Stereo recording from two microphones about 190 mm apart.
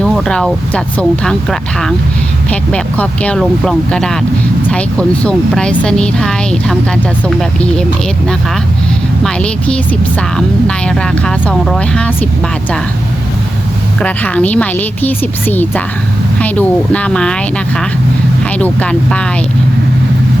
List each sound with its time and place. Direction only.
0.0 s speech: 5° left (ahead or behind)
9.2 s speech: 5° left (ahead or behind)
14.0 s a woman's voice: 5° left (ahead or behind)
18.6 s a woman's voice: 5° left (ahead or behind)